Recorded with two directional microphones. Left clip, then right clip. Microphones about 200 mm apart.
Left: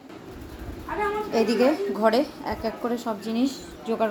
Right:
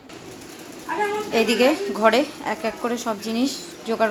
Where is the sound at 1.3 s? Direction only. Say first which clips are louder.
Right 3 dB; centre (ahead or behind).